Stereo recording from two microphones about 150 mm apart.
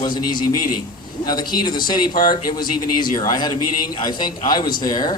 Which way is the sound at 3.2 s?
30° left (ahead or behind).